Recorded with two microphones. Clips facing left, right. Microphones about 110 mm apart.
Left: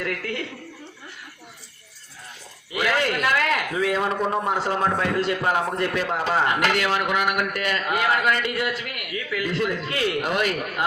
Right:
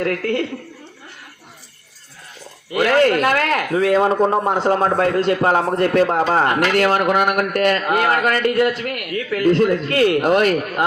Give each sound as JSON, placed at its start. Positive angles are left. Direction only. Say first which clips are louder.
{"t": 0.0, "sound": "speech", "louder": "right 9 dB", "side_deg": -45}
{"t": 2.7, "sound": "speech", "louder": "right 9 dB", "side_deg": -45}